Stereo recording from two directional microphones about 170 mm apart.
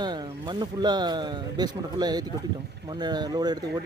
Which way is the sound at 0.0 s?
25° right (ahead or behind).